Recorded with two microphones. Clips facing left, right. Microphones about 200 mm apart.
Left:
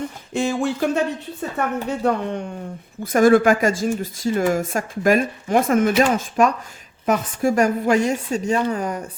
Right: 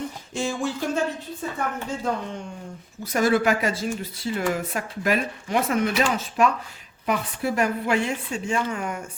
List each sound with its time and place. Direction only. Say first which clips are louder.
0.3 s a woman's voice: left 6 dB; 60° left (ahead or behind)
3.0 s a woman's voice: left 7 dB; 50° left (ahead or behind); by 9.0 s 35° left (ahead or behind)